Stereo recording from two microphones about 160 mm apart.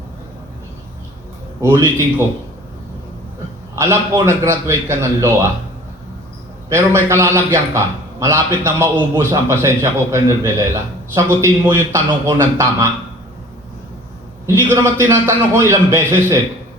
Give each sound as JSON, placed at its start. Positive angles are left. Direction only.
{"t": 1.6, "sound": "a man's voice", "side_deg": -15}
{"t": 3.8, "sound": "a man's voice", "side_deg": -15}
{"t": 6.7, "sound": "a man's voice", "side_deg": -15}
{"t": 14.4, "sound": "a man's voice", "side_deg": -15}